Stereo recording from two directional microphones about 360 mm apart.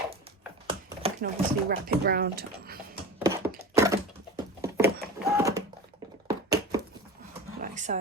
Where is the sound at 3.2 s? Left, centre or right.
Centre.